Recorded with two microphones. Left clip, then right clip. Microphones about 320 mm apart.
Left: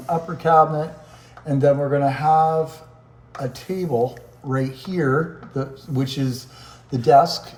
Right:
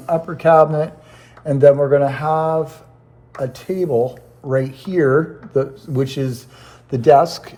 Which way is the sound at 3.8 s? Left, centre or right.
Right.